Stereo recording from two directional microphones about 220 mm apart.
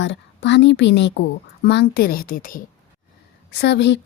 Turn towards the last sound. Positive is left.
turn(degrees=50)  # may be behind; listen again after turning